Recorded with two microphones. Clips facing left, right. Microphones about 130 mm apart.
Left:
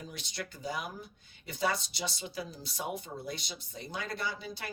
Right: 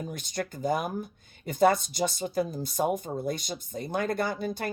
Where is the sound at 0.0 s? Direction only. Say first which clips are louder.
Right 8 dB; 50° right (ahead or behind).